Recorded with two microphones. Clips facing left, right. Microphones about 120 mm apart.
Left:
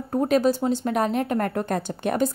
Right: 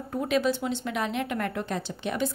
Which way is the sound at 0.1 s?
40° left (ahead or behind).